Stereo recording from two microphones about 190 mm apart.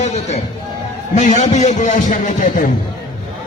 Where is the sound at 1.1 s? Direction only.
40° left (ahead or behind).